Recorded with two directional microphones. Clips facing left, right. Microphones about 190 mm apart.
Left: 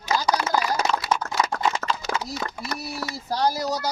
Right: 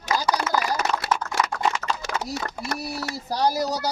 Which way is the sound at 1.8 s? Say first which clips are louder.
Left 1 dB; 50° left (ahead or behind).